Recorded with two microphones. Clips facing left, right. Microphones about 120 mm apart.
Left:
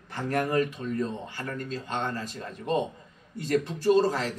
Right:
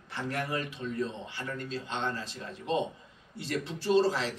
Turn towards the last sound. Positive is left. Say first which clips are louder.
# left 3 dB
turn(degrees=50)  # may be behind; listen again after turning